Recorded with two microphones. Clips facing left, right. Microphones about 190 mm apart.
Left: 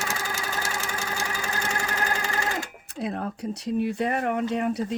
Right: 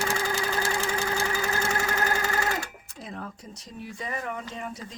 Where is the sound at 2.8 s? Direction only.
65° left (ahead or behind).